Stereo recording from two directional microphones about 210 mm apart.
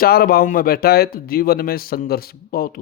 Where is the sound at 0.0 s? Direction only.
45° left (ahead or behind).